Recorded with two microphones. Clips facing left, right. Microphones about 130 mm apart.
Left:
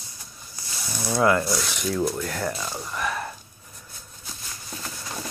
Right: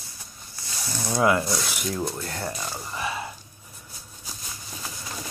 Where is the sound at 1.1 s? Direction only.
15° right (ahead or behind).